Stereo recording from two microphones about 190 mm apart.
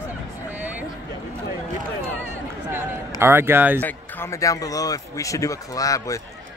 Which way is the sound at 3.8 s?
10° left (ahead or behind).